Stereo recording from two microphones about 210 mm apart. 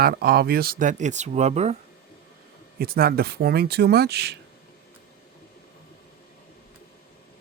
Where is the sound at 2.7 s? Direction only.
45° right (ahead or behind).